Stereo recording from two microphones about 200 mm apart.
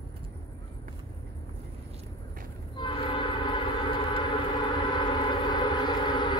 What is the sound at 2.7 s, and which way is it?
Train, 25° left (ahead or behind).